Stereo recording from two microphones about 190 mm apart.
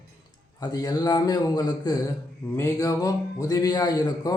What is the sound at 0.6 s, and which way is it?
A man's voice, 20° left (ahead or behind).